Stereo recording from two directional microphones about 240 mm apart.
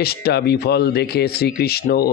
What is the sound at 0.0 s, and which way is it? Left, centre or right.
Speech, left.